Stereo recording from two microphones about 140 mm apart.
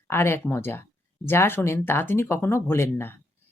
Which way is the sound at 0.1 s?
15° left (ahead or behind).